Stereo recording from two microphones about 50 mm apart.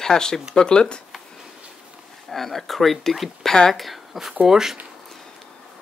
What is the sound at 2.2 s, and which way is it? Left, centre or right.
Speech, centre.